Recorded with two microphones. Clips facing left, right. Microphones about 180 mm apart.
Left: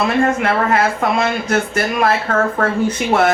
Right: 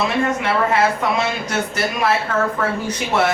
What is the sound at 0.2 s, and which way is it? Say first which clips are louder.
Speech: left 3 dB; 50° left (ahead or behind).